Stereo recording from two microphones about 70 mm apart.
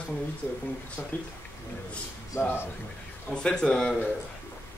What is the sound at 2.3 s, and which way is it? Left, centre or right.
Speech, left.